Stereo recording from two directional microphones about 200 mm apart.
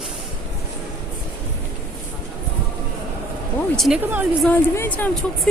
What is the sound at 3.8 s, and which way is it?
Speech, 5° right (ahead or behind).